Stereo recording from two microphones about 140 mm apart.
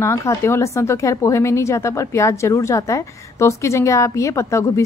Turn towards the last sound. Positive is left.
turn(degrees=20)  # may be behind; listen again after turning